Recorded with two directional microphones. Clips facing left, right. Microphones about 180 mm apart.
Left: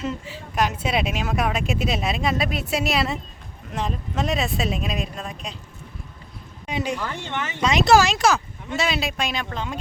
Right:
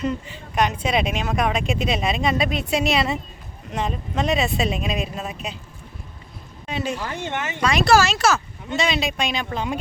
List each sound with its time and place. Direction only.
0.0 s speech: 5° left (ahead or behind)
6.7 s speech: 15° left (ahead or behind)
8.7 s speech: 5° left (ahead or behind)
9.5 s speech: 10° right (ahead or behind)